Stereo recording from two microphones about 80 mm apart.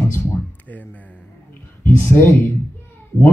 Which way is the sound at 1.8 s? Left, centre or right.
Left.